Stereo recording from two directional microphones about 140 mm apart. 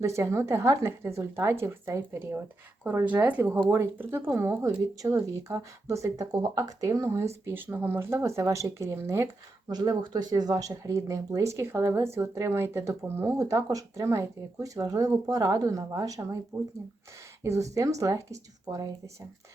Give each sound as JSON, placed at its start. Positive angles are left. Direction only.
{"t": 0.0, "sound": "speech", "side_deg": -20}
{"t": 17.4, "sound": "speech", "side_deg": -20}